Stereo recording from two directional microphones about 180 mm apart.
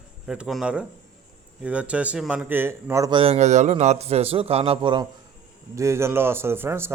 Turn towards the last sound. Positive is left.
turn(degrees=-15)  # may be behind; listen again after turning